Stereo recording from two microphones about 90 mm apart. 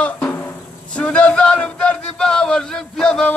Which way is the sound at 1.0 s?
10° left (ahead or behind).